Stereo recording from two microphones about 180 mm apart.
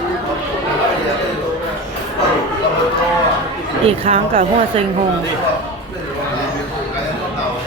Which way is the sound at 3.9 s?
30° right (ahead or behind).